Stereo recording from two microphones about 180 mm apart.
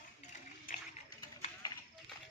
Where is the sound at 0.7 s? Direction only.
50° left (ahead or behind).